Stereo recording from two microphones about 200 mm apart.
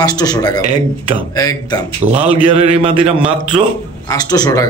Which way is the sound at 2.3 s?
25° right (ahead or behind).